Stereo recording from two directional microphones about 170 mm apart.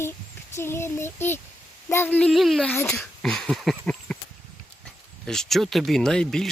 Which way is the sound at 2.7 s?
15° left (ahead or behind).